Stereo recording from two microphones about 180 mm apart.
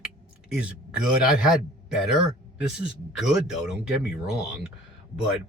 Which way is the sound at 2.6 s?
5° right (ahead or behind).